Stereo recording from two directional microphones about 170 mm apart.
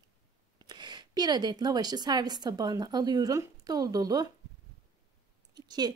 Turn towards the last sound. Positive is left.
turn(degrees=-25)  # may be behind; listen again after turning